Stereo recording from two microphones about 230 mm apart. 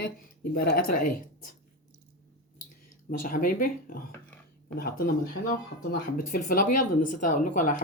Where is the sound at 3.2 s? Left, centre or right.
Left.